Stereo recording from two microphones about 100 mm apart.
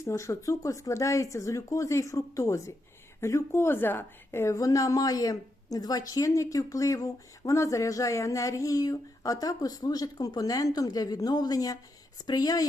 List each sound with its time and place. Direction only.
0.0 s a woman's voice: 30° left (ahead or behind)